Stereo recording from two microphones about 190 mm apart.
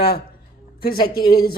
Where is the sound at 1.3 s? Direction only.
50° left (ahead or behind).